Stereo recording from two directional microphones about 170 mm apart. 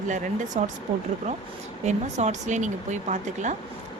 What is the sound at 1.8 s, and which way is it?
Speech, 40° right (ahead or behind).